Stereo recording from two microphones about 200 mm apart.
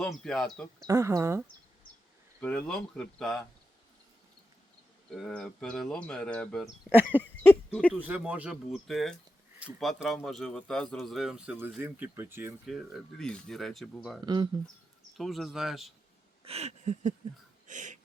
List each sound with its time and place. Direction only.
0.0 s a man's voice: 5° left (ahead or behind)
0.9 s speech: 15° right (ahead or behind)
2.4 s a man's voice: 5° left (ahead or behind)
5.1 s a man's voice: centre (ahead or behind)
7.9 s a man's voice: 10° right (ahead or behind)
12.6 s a man's voice: centre (ahead or behind)
14.3 s speech: 20° right (ahead or behind)
15.2 s a man's voice: centre (ahead or behind)
16.4 s a sound: 30° right (ahead or behind)
17.7 s wheeze: 40° right (ahead or behind)